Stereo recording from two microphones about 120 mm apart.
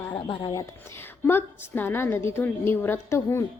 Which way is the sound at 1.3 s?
20° left (ahead or behind).